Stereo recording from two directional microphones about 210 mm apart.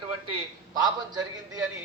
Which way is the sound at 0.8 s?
20° right (ahead or behind).